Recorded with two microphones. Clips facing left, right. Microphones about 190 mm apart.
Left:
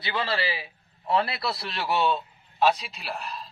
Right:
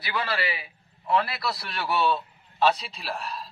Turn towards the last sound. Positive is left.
turn(degrees=0)  # may be behind; listen again after turning